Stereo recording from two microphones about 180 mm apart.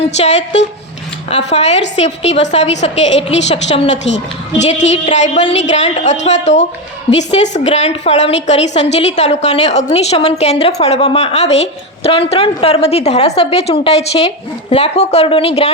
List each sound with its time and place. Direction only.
0.2 s a woman's voice: 40° left (ahead or behind)